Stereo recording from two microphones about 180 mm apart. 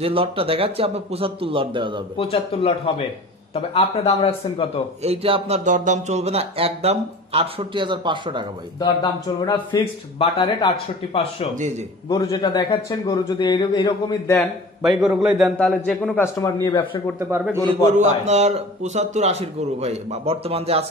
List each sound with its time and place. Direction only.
0.0 s speech: 30° right (ahead or behind)
2.1 s speech: 35° left (ahead or behind)
3.7 s speech: 35° left (ahead or behind)
5.0 s speech: 35° right (ahead or behind)
8.7 s a man's voice: 25° left (ahead or behind)
12.1 s a man's voice: 20° left (ahead or behind)
14.8 s a man's voice: centre (ahead or behind)
16.6 s a man's voice: 25° left (ahead or behind)
17.3 s a man's voice: 15° right (ahead or behind)
17.9 s speech: 40° right (ahead or behind)